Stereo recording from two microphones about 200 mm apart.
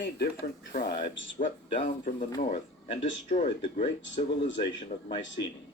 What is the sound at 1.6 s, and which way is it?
Speech, 25° left (ahead or behind).